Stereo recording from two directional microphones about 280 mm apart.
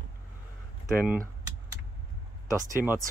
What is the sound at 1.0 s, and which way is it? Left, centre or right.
Speech, centre.